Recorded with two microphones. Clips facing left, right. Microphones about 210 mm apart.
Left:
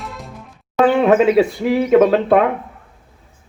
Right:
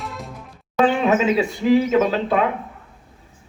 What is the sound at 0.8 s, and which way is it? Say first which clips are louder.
A man's voice: left 6 dB; 55° left (ahead or behind).